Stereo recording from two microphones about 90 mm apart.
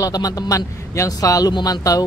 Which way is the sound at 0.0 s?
45° left (ahead or behind).